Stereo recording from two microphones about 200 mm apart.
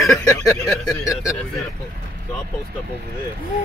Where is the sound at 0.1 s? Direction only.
5° left (ahead or behind).